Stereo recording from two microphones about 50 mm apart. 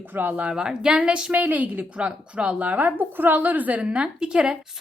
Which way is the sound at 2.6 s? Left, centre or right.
Right.